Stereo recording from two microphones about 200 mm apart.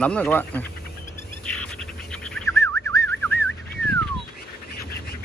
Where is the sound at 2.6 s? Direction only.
15° left (ahead or behind).